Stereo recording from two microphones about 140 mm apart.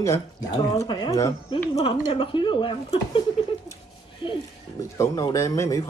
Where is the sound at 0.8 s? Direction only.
35° left (ahead or behind).